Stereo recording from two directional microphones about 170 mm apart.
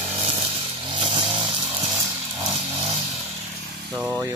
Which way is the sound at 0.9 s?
30° right (ahead or behind).